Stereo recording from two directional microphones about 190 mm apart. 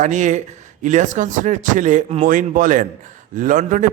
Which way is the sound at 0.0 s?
40° right (ahead or behind).